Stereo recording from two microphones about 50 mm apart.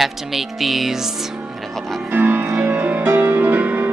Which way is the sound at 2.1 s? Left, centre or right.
Right.